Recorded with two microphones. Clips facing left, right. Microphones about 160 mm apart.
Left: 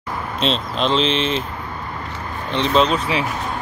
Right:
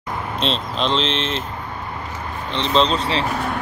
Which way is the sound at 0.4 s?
Centre (ahead or behind).